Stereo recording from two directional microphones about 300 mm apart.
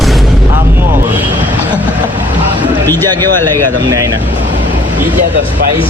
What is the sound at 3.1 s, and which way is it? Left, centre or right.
Speech, centre.